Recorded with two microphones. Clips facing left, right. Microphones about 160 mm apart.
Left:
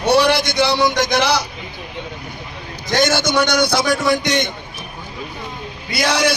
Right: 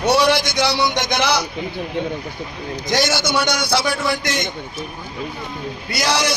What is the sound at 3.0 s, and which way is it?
Speech, 55° left (ahead or behind).